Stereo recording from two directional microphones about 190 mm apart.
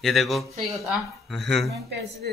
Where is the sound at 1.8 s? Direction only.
60° right (ahead or behind).